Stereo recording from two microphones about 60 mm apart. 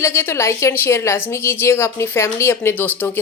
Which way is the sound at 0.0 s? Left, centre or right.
Left.